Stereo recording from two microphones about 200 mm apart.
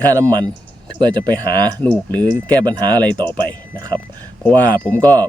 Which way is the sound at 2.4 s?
20° right (ahead or behind).